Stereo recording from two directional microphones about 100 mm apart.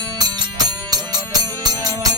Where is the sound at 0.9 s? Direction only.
40° right (ahead or behind).